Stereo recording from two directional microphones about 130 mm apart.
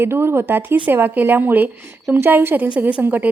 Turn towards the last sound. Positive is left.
turn(degrees=-10)  # may be behind; listen again after turning